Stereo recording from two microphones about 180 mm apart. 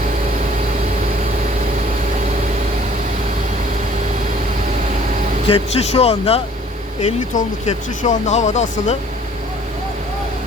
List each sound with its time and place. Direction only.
5.5 s speech: 35° left (ahead or behind)